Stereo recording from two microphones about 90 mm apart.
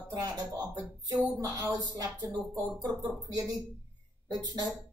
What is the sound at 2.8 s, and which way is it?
Speech, 55° right (ahead or behind).